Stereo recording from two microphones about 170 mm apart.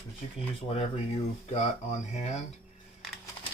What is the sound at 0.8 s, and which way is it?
Speech, 40° left (ahead or behind).